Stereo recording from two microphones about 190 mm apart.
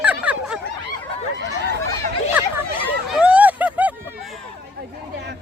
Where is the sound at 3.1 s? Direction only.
5° right (ahead or behind).